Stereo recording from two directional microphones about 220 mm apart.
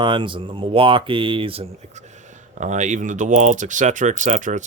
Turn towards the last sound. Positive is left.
turn(degrees=-35)  # may be behind; listen again after turning